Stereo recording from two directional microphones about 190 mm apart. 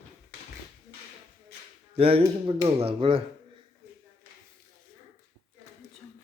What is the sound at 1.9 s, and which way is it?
Speech, 30° right (ahead or behind).